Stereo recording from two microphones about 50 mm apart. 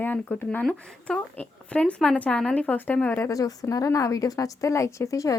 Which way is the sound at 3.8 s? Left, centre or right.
Left.